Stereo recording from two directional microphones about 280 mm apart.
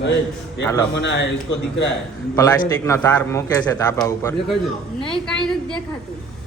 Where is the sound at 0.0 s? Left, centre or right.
Left.